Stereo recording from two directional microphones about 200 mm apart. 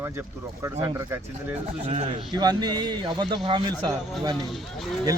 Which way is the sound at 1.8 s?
35° right (ahead or behind).